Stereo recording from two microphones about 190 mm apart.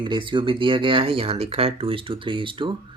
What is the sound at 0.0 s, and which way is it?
Speech, 25° right (ahead or behind).